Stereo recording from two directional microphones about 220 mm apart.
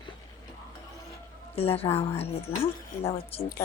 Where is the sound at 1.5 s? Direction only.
25° left (ahead or behind).